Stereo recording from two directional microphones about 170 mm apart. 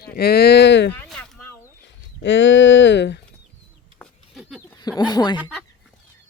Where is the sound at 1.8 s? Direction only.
90° left.